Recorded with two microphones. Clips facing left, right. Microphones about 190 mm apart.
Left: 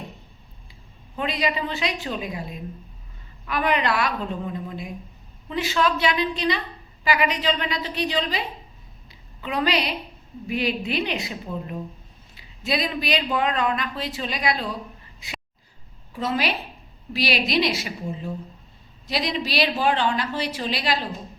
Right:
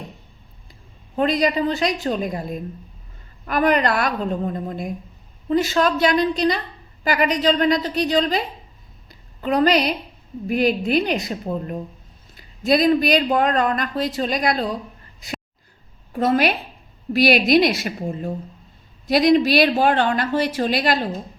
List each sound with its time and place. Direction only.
1.1 s speech: 40° right (ahead or behind)
9.0 s a sound: 40° right (ahead or behind)
10.4 s speech: 45° right (ahead or behind)
16.1 s speech: 55° right (ahead or behind)